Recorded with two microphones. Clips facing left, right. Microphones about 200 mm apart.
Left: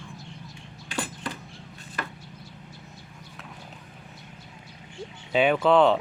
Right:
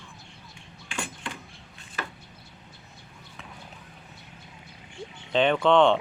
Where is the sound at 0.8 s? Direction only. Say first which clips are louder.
Left 3 dB; 35° left (ahead or behind).